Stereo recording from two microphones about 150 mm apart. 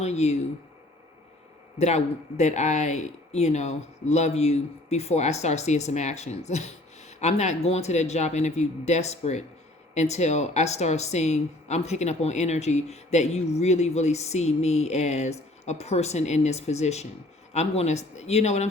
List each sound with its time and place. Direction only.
0.0 s speech: 45° left (ahead or behind)
1.8 s speech: 50° left (ahead or behind)